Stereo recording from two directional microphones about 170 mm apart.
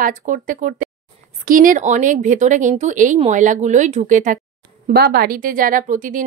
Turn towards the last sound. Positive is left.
turn(degrees=-50)  # may be behind; listen again after turning